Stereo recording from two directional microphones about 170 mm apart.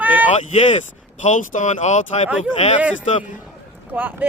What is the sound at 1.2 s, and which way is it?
Speech, 45° left (ahead or behind).